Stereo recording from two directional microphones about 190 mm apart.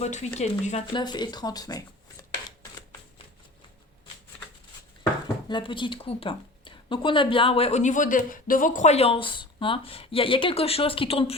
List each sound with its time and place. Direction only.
0.0 s speech: 35° left (ahead or behind)
0.9 s speech: 20° left (ahead or behind)
5.5 s speech: 25° left (ahead or behind)